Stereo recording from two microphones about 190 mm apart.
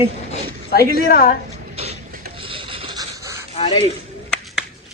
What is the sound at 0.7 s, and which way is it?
Speech, 50° left (ahead or behind).